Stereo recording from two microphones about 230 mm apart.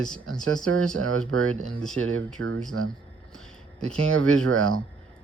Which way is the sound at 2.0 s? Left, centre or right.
Right.